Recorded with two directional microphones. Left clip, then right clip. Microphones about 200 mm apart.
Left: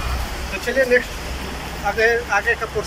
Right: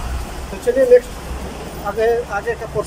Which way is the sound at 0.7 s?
30° right (ahead or behind).